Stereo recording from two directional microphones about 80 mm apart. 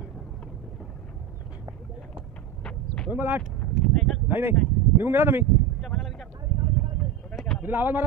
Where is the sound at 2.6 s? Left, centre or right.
Centre.